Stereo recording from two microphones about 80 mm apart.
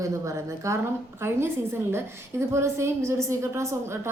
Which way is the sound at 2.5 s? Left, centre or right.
Right.